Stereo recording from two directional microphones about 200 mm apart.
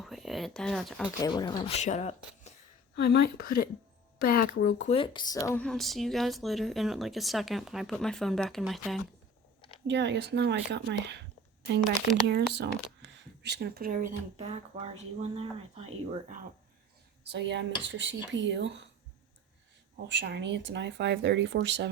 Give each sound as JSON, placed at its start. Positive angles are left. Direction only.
{"t": 0.0, "sound": "speech", "side_deg": 0}
{"t": 1.2, "sound": "speech", "side_deg": 20}
{"t": 2.9, "sound": "a woman's voice", "side_deg": 55}
{"t": 4.9, "sound": "speech", "side_deg": 20}
{"t": 9.8, "sound": "speech", "side_deg": -60}
{"t": 12.3, "sound": "speech", "side_deg": -55}
{"t": 17.2, "sound": "speech", "side_deg": -60}
{"t": 20.1, "sound": "speech", "side_deg": -60}